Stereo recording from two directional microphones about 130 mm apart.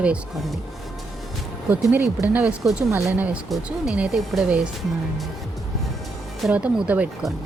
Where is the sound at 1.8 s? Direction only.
15° right (ahead or behind).